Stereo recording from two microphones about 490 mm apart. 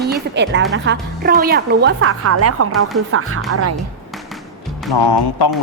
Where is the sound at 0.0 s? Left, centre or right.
Centre.